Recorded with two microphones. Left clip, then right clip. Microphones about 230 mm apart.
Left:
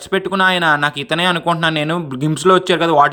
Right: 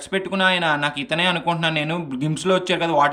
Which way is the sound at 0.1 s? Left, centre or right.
Centre.